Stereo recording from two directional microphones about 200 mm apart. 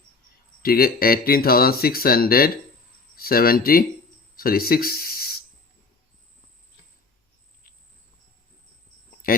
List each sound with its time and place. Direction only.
0.6 s speech: 50° left (ahead or behind)
9.2 s speech: 45° left (ahead or behind)